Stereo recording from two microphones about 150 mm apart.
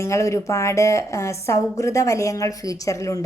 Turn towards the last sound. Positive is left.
turn(degrees=20)  # may be behind; listen again after turning